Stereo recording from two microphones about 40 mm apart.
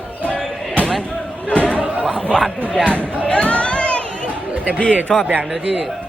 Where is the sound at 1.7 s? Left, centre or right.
Right.